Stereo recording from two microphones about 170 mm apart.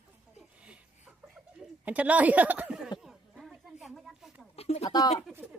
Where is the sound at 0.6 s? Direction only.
5° right (ahead or behind).